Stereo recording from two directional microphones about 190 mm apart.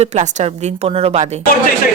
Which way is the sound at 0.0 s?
35° right (ahead or behind).